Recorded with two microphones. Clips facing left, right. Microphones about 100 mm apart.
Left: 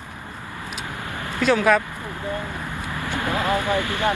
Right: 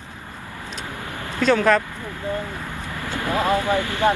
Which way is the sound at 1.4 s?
5° left (ahead or behind).